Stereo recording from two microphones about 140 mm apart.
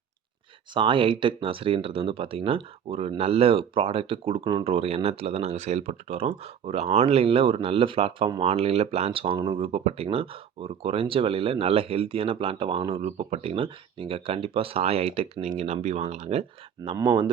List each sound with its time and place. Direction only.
0.7 s speech: 35° right (ahead or behind)
16.9 s speech: 35° right (ahead or behind)